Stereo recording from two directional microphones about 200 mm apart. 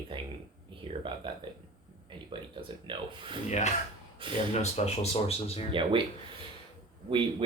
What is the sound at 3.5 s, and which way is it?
Speech, 35° left (ahead or behind).